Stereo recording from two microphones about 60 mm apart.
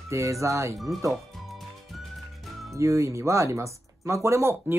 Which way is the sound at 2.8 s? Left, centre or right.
Right.